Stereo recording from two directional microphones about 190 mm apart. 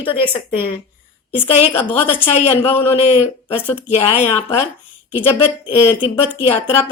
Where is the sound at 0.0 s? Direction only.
30° left (ahead or behind).